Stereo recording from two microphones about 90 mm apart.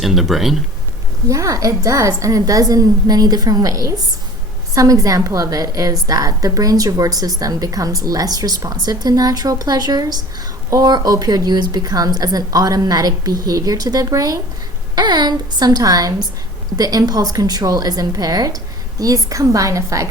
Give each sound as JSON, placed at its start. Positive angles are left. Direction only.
{"t": 0.0, "sound": "speech", "side_deg": 0}
{"t": 1.3, "sound": "a woman's voice", "side_deg": -35}
{"t": 14.9, "sound": "a woman's voice", "side_deg": -55}